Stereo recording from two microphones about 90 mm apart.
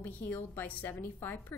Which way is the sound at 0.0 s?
20° left (ahead or behind).